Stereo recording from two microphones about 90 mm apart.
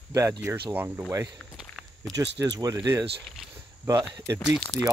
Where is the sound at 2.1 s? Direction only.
40° right (ahead or behind).